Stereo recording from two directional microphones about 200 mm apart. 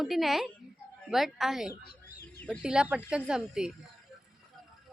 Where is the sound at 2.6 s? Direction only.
5° right (ahead or behind).